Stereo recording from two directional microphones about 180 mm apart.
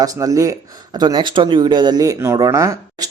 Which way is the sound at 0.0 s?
20° right (ahead or behind).